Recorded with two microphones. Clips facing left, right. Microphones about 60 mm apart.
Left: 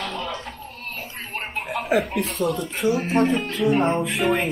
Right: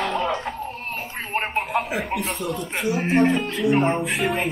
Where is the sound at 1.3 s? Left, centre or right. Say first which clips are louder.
Right 6 dB; right.